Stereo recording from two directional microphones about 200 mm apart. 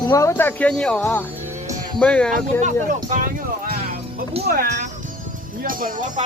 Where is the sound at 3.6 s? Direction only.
45° right (ahead or behind).